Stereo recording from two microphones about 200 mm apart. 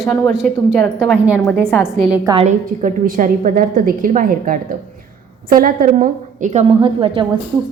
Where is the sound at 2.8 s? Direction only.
45° right (ahead or behind).